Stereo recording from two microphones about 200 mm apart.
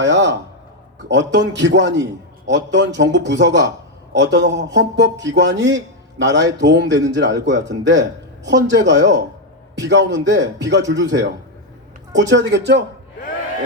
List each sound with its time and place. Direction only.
0.0 s a man's voice: 60° right (ahead or behind)